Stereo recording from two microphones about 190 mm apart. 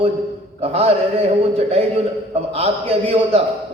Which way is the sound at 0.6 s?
35° right (ahead or behind).